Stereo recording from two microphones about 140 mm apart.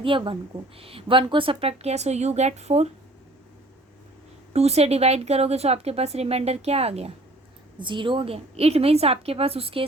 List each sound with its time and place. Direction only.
0.0 s speech: 40° right (ahead or behind)
4.5 s speech: 50° right (ahead or behind)
7.8 s speech: 35° right (ahead or behind)